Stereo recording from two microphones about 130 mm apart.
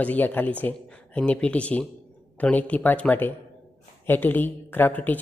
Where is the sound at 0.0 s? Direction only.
15° left (ahead or behind).